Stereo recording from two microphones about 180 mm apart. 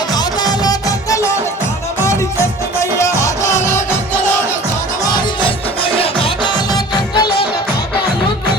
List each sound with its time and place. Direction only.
0.1 s music: 20° left (ahead or behind)
3.0 s music: 15° left (ahead or behind)
5.1 s music: 25° left (ahead or behind)